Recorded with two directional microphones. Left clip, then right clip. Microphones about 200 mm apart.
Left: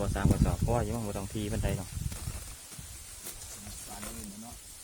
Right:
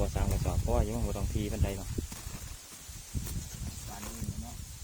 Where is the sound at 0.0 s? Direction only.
20° left (ahead or behind).